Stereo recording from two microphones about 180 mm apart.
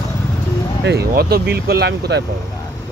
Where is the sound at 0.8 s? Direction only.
65° right (ahead or behind).